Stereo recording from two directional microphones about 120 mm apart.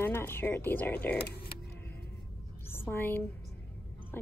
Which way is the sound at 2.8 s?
20° left (ahead or behind).